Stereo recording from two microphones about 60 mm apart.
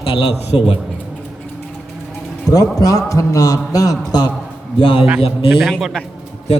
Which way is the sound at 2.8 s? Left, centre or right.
Left.